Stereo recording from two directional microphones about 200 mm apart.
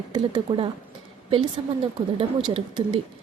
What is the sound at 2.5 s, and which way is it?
Speech, 25° right (ahead or behind).